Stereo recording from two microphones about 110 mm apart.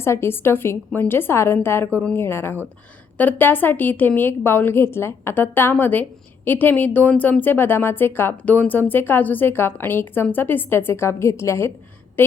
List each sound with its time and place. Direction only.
0.0 s a woman's voice: 20° left (ahead or behind)